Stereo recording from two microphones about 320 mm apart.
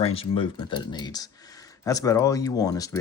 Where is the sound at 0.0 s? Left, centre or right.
Centre.